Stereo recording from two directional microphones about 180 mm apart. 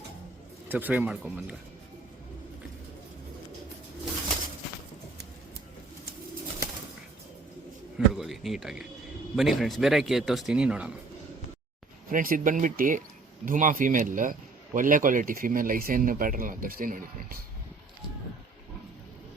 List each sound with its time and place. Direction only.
0.7 s speech: 10° right (ahead or behind)
7.9 s speech: centre (ahead or behind)
12.1 s speech: 50° right (ahead or behind)